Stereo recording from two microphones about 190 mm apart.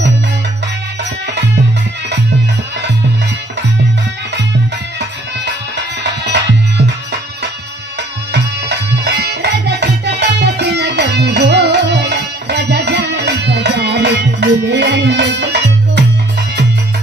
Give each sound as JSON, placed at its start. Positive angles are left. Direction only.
{"t": 6.0, "sound": "music", "side_deg": -65}
{"t": 8.3, "sound": "music", "side_deg": -60}